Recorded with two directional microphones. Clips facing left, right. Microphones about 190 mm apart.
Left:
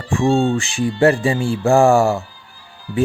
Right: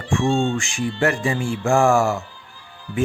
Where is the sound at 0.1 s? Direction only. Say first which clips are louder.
Left 4 dB; 35° left (ahead or behind).